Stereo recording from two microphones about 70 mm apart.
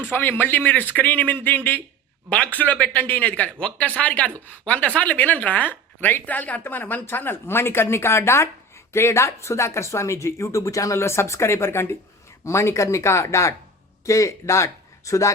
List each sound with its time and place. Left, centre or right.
0.0 s speech: left